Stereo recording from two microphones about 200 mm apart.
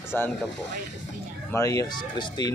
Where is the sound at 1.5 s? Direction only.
15° left (ahead or behind).